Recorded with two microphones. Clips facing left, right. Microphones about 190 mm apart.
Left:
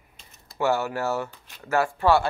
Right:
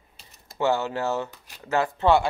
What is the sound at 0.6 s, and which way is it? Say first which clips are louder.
Speech: even; 20° right (ahead or behind).